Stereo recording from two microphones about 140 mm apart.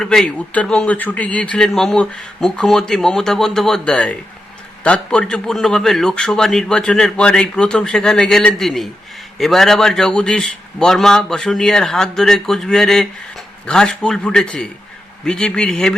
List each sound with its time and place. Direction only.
0.0 s a man's voice: 5° left (ahead or behind)